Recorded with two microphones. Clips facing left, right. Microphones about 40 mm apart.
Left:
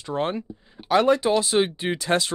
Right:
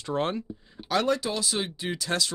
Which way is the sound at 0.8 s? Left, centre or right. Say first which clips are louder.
Left 7 dB; left.